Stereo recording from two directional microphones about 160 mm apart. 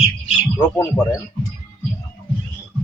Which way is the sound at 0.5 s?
20° left (ahead or behind).